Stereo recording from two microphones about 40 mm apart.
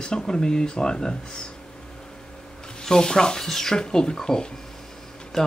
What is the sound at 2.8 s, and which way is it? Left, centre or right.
Speech, centre.